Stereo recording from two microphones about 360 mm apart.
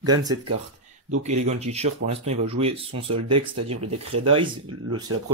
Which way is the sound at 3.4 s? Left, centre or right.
Right.